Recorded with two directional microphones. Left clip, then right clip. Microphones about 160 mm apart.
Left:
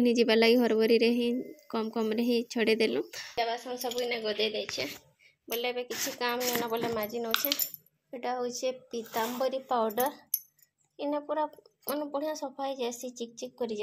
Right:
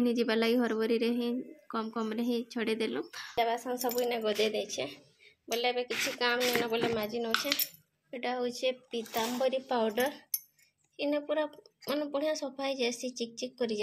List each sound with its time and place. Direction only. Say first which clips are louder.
0.0 s a woman's voice: left 5 dB; 25° left (ahead or behind)
3.3 s speech: right 1 dB; 20° right (ahead or behind)
5.5 s a woman's voice: right 2 dB; centre (ahead or behind)